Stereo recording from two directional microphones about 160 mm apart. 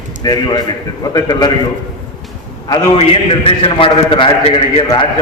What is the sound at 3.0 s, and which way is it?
A man's voice, 35° left (ahead or behind).